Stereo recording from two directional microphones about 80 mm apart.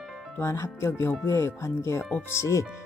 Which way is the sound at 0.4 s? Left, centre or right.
Left.